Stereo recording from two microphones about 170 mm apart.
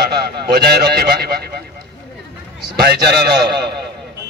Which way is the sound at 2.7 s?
75° right (ahead or behind).